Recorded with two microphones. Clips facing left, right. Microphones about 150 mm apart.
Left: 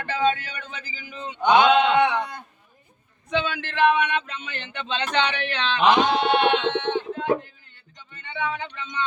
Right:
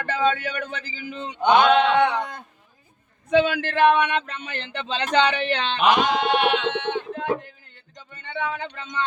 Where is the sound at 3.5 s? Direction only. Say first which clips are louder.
Right 2 dB; 45° right (ahead or behind).